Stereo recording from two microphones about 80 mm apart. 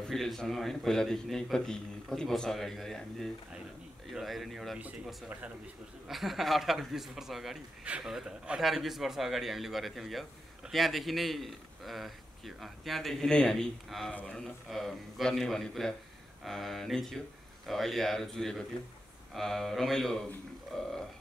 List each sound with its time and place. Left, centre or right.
0.0 s speech: centre
6.0 s speech: centre
14.7 s speech: centre